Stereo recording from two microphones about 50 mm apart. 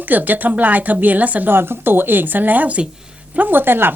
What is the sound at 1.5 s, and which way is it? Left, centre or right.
Speech, right.